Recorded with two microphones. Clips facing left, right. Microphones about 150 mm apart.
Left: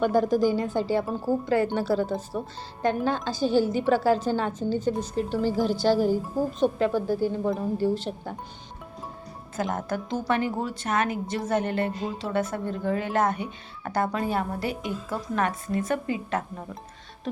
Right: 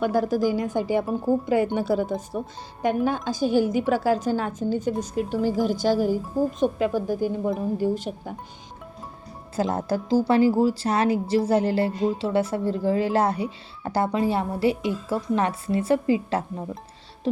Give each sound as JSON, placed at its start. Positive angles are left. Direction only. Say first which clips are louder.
{"t": 0.0, "sound": "a woman's voice", "louder": "even", "side_deg": -10}
{"t": 9.6, "sound": "a woman's voice", "louder": "right 4 dB", "side_deg": -35}